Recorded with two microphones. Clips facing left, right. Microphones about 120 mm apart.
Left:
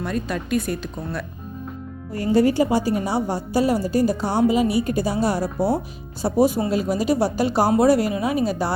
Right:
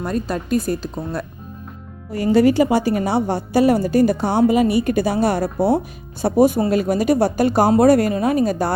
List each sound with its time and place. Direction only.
0.0 s a woman's voice: 40° right (ahead or behind)
2.1 s a woman's voice: 85° right; by 8.7 s 50° right (ahead or behind)